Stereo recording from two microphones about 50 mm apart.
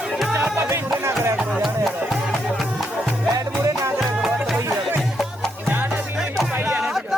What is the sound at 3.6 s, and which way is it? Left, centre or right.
Music, right.